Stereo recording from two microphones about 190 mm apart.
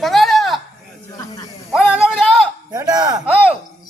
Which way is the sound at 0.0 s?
Centre (ahead or behind).